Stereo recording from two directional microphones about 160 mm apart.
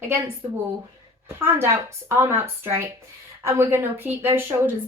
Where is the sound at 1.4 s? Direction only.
15° right (ahead or behind).